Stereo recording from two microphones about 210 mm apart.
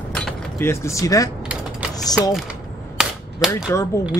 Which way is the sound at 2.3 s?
Centre (ahead or behind).